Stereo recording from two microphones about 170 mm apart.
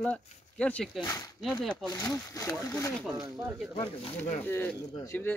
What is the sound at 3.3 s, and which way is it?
Speech, 5° right (ahead or behind).